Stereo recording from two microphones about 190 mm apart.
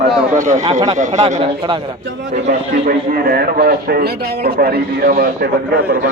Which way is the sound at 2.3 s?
40° right (ahead or behind).